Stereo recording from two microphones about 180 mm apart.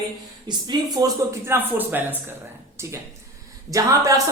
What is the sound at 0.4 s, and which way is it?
Speech, 25° right (ahead or behind).